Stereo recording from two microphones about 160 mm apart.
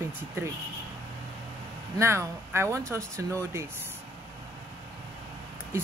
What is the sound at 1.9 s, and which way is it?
Speech, 20° right (ahead or behind).